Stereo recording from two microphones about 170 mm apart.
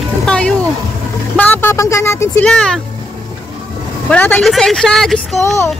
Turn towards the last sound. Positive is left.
turn(degrees=15)  # may be behind; listen again after turning